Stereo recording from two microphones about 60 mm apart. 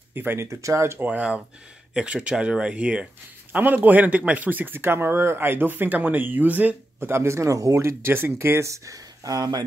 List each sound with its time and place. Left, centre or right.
0.1 s speech: right
0.5 s speech: right
0.9 s a man's voice: right
7.0 s speech: right
8.0 s speech: right